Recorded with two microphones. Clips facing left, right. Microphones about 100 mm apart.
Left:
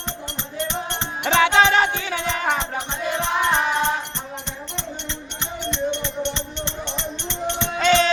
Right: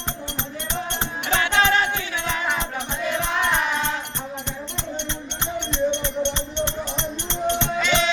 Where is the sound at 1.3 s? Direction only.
90° left.